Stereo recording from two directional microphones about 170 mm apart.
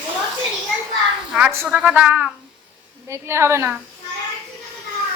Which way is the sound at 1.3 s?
10° right (ahead or behind).